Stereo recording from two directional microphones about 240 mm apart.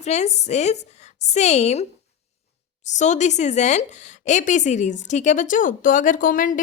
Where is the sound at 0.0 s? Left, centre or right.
Left.